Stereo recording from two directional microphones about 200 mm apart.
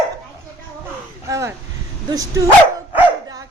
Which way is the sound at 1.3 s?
15° right (ahead or behind).